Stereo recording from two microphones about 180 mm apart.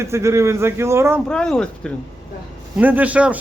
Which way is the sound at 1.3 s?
5° left (ahead or behind).